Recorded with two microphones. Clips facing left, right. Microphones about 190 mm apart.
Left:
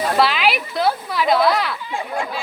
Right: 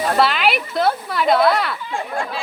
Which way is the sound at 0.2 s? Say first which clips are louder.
Even; centre (ahead or behind).